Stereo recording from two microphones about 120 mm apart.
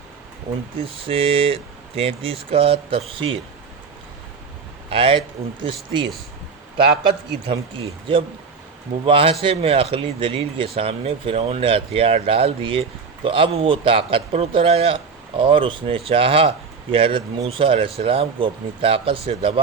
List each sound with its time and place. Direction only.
0.8 s speech: 50° right (ahead or behind)
4.9 s speech: 45° right (ahead or behind)
7.1 s speech: 50° right (ahead or behind)